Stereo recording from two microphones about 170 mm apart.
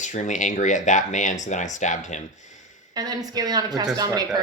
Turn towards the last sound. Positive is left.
turn(degrees=-25)  # may be behind; listen again after turning